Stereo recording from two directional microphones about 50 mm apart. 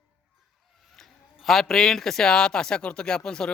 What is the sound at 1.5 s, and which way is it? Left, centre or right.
Speech, centre.